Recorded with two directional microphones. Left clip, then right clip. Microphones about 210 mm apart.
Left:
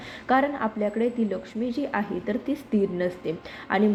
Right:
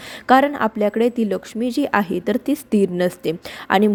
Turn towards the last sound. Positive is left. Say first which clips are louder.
# right 7 dB
turn(degrees=-30)  # may be behind; listen again after turning